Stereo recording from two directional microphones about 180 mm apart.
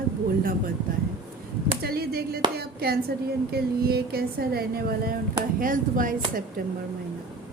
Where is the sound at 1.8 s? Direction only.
60° right (ahead or behind).